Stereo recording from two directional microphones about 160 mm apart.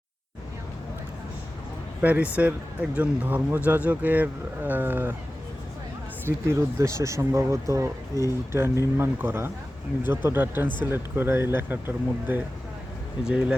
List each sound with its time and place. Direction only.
2.0 s speech: 10° right (ahead or behind)
6.2 s speech: 15° right (ahead or behind)